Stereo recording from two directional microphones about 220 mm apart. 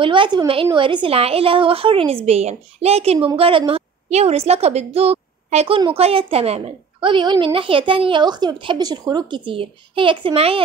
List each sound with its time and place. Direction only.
0.0 s a woman's voice: 20° right (ahead or behind)